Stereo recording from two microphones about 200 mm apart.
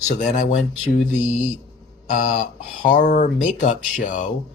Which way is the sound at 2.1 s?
40° left (ahead or behind).